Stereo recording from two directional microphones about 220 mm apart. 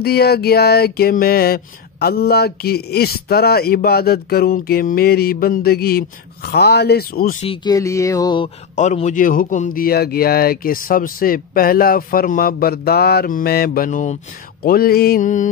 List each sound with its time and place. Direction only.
0.0 s a sound: 45° left (ahead or behind)
7.4 s speech: 15° left (ahead or behind)
8.7 s a man's voice: 30° left (ahead or behind)